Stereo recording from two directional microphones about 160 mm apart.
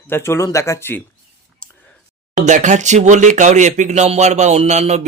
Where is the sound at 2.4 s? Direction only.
50° right (ahead or behind).